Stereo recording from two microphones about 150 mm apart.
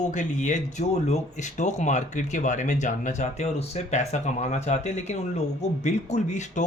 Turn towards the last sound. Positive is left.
turn(degrees=50)  # may be behind; listen again after turning